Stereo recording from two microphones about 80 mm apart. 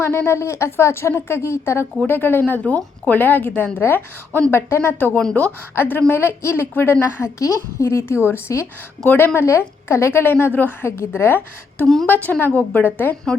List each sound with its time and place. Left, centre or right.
0.0 s a woman's voice: left; by 5.5 s centre
5.7 s a woman's voice: left